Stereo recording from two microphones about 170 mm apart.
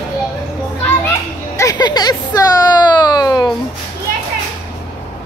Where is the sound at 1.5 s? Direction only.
20° left (ahead or behind).